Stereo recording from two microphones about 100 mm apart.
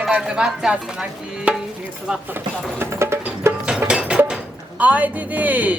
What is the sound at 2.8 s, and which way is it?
Music, 25° right (ahead or behind).